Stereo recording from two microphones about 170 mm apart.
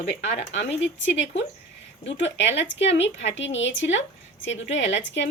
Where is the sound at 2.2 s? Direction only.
90° left.